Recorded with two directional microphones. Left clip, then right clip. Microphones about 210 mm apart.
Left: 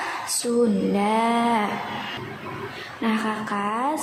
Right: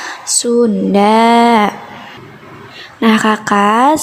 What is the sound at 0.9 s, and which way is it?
Speech, 45° right (ahead or behind).